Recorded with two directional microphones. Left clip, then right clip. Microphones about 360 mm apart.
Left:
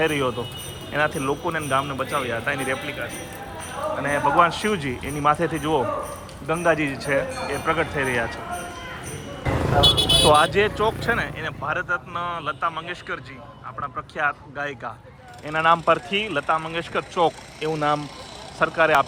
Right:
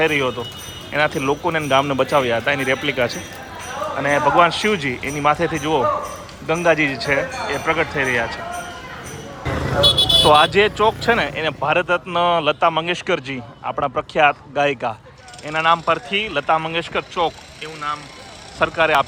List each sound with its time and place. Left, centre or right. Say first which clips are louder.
0.0 s speech: right 4 dB; centre
4.0 s speech: right 4 dB; centre
9.8 s vehicle: right 4 dB; left
10.2 s speech: right 3 dB; centre
18.6 s speech: right 2 dB; centre